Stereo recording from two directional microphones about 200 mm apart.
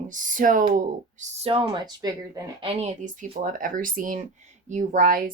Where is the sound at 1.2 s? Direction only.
30° right (ahead or behind).